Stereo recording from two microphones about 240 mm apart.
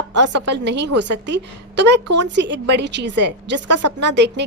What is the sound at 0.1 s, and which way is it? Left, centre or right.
A woman's voice, right.